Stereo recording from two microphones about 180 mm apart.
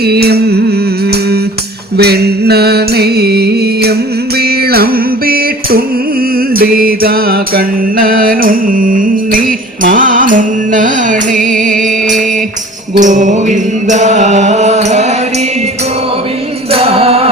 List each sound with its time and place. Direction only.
0.0 s music: 60° right (ahead or behind)
2.0 s music: 60° right (ahead or behind)
6.5 s mantra: 55° right (ahead or behind)
9.8 s music: 50° right (ahead or behind)
13.0 s mantra: 45° right (ahead or behind)
16.7 s music: 35° right (ahead or behind)